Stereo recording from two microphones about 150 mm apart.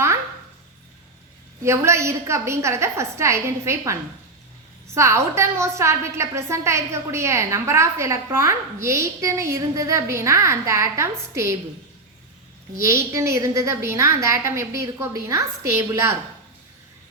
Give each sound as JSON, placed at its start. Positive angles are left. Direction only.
{"t": 1.6, "sound": "a woman's voice", "side_deg": -20}
{"t": 4.9, "sound": "a woman's voice", "side_deg": -20}
{"t": 12.8, "sound": "a woman's voice", "side_deg": -20}